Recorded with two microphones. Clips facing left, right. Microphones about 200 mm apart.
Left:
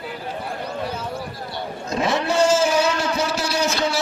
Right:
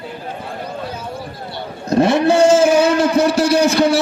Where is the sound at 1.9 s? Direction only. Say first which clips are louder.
Right 9 dB; 60° right (ahead or behind).